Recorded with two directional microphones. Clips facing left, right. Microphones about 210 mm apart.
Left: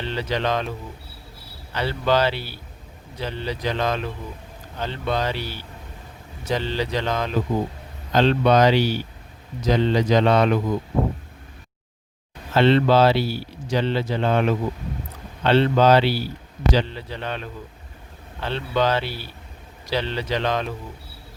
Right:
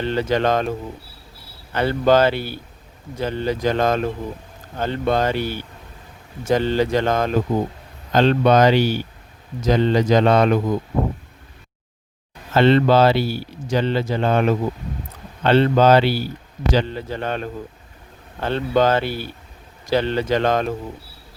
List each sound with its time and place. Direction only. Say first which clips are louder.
0.0 s speech: right 6 dB; 50° right (ahead or behind)
1.7 s speech: right 5 dB; 50° right (ahead or behind)
12.5 s speech: right 2 dB; 50° right (ahead or behind)